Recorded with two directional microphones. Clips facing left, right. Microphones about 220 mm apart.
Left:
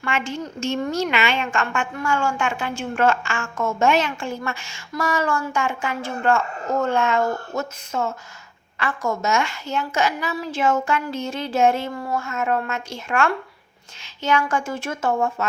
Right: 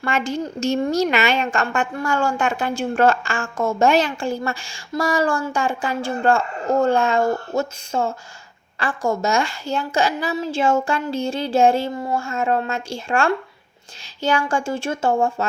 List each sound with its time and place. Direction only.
0.0 s a woman's voice: 40° right (ahead or behind)